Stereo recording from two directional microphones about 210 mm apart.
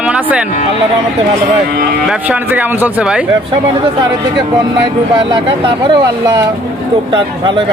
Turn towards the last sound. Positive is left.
turn(degrees=-25)  # may be behind; listen again after turning